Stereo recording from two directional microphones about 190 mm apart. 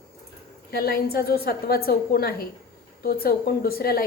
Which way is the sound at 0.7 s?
55° left (ahead or behind).